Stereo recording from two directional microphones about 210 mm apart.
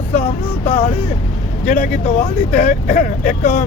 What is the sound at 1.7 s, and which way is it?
Speech, 35° left (ahead or behind).